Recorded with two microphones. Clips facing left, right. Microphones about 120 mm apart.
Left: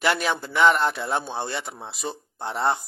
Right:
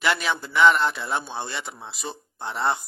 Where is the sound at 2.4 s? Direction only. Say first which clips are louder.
Left 1 dB; 35° left (ahead or behind).